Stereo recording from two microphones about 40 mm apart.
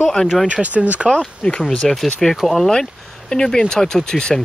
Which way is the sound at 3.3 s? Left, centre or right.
Centre.